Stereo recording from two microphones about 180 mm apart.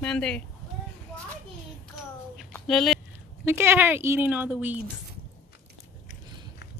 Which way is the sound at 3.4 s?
10° right (ahead or behind).